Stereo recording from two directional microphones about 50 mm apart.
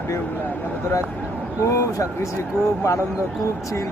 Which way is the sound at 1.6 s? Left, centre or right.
Left.